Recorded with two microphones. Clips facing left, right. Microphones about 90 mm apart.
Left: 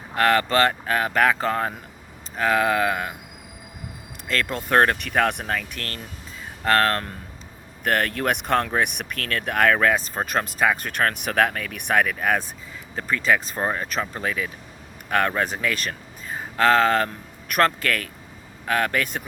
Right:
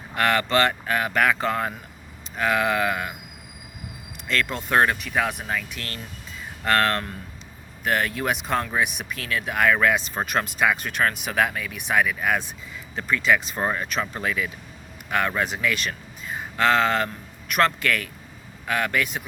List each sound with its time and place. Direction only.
0.1 s speech: 35° left (ahead or behind)
4.3 s speech: 40° left (ahead or behind)
4.9 s speech: 60° left (ahead or behind)
6.7 s speech: 35° left (ahead or behind)
7.9 s speech: 55° left (ahead or behind)